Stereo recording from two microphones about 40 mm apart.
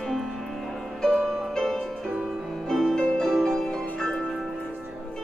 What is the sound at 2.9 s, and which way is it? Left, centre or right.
Music, centre.